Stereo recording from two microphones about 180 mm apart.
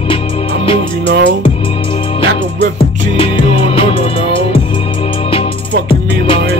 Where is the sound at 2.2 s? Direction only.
30° left (ahead or behind).